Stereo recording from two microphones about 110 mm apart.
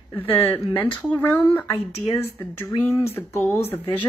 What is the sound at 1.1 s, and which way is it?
Speech, 15° left (ahead or behind).